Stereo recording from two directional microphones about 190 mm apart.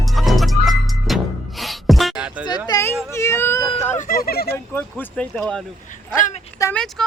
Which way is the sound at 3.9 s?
45° left (ahead or behind).